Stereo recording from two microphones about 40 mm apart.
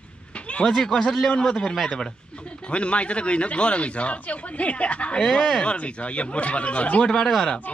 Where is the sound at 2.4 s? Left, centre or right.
Left.